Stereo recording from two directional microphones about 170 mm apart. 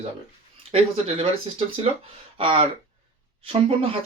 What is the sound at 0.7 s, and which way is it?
Speech, 35° right (ahead or behind).